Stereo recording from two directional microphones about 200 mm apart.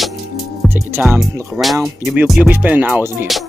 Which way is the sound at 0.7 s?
10° right (ahead or behind).